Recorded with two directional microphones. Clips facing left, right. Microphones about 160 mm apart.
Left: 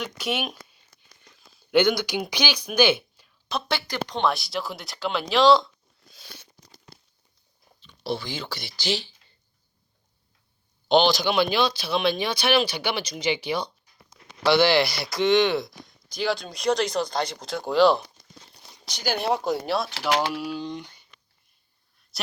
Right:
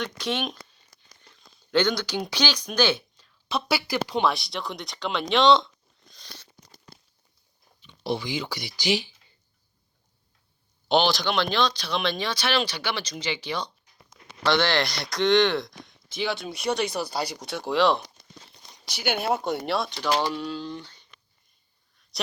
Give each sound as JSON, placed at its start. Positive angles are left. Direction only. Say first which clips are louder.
{"t": 0.0, "sound": "speech", "louder": "even", "side_deg": 10}
{"t": 3.5, "sound": "speech", "louder": "right 2 dB", "side_deg": -5}
{"t": 5.3, "sound": "a sound", "louder": "left 1 dB", "side_deg": 0}
{"t": 7.8, "sound": "speech", "louder": "right 1 dB", "side_deg": -20}
{"t": 10.8, "sound": "speech", "louder": "left 3 dB", "side_deg": 0}
{"t": 22.1, "sound": "speech", "louder": "right 3 dB", "side_deg": 0}